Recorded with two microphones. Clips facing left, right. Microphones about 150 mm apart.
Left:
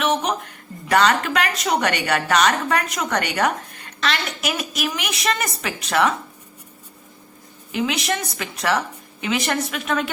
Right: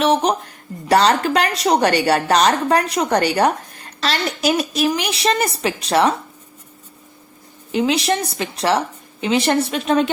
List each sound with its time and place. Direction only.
0.0 s a woman's voice: 35° right (ahead or behind)
7.7 s a woman's voice: 30° right (ahead or behind)